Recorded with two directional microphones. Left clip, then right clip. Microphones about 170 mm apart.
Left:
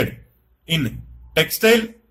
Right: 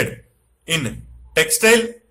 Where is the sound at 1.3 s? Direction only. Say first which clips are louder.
Right 1 dB; 15° left (ahead or behind).